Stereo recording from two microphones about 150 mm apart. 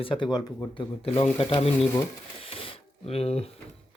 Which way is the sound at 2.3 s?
40° left (ahead or behind).